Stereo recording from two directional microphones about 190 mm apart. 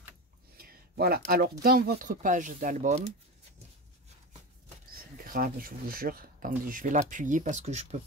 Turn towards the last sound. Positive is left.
turn(degrees=-35)  # may be behind; listen again after turning